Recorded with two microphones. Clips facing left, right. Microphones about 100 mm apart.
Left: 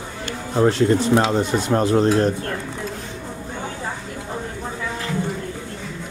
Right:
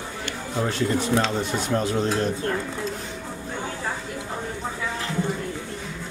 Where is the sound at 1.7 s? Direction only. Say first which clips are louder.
Left 7 dB; 45° left (ahead or behind).